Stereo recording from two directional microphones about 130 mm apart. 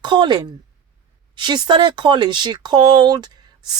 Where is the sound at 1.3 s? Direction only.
35° right (ahead or behind).